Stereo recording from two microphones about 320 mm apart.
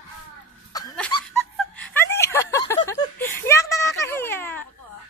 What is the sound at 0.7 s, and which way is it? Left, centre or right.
Laughter, centre.